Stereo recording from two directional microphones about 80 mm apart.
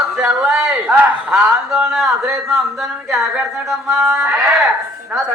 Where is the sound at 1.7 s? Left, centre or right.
Centre.